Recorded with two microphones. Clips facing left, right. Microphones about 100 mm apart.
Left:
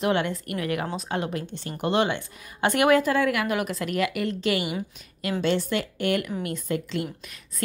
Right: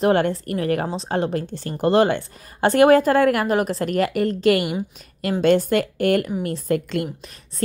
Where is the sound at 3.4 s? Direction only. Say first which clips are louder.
Right 6 dB; 35° right (ahead or behind).